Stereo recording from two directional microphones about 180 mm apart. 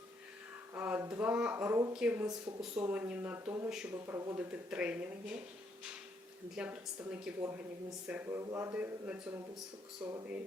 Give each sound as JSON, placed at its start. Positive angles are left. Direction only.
{"t": 0.7, "sound": "speech", "side_deg": -10}
{"t": 6.6, "sound": "speech", "side_deg": -5}